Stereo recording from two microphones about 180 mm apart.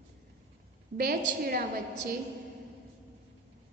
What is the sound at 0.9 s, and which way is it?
Speech, 60° right (ahead or behind).